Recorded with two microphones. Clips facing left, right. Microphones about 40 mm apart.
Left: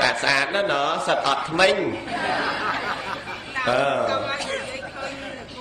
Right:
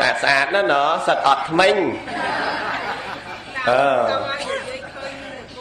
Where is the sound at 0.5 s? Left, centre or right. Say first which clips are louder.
Right 5 dB; right.